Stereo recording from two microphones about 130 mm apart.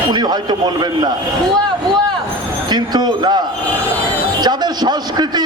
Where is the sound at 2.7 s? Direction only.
35° right (ahead or behind).